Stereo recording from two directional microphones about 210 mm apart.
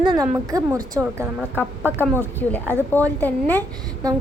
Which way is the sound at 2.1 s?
10° left (ahead or behind).